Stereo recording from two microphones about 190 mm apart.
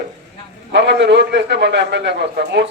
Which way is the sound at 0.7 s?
65° right (ahead or behind).